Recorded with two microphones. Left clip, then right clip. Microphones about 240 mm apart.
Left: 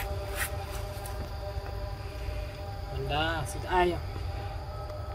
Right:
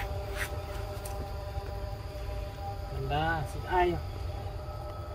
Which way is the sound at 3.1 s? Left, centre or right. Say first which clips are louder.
Even; left.